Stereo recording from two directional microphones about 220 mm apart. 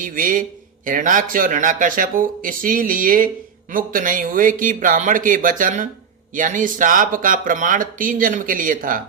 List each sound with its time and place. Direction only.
0.0 s speech: 40° right (ahead or behind)